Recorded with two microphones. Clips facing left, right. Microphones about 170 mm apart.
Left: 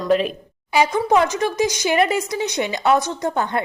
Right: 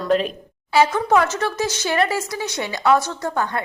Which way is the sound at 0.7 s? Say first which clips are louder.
Even; 15° left (ahead or behind).